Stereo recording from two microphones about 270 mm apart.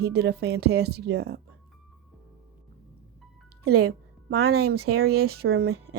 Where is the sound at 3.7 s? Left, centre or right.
Right.